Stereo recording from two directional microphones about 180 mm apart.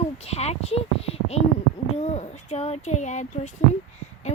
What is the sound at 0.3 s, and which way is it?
A woman's voice, 35° left (ahead or behind).